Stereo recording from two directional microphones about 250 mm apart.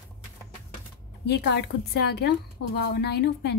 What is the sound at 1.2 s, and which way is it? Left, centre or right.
A woman's voice, left.